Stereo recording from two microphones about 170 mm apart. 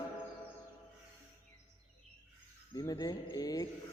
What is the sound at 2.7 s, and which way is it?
Speech, 20° left (ahead or behind).